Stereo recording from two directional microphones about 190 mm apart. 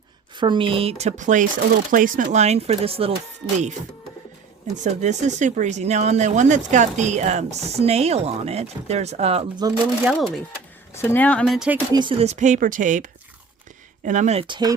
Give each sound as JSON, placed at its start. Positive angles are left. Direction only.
{"t": 0.3, "sound": "speech", "side_deg": -25}
{"t": 4.8, "sound": "speech", "side_deg": -40}
{"t": 10.0, "sound": "speech", "side_deg": -5}
{"t": 10.9, "sound": "speech", "side_deg": 10}
{"t": 11.9, "sound": "speech", "side_deg": -30}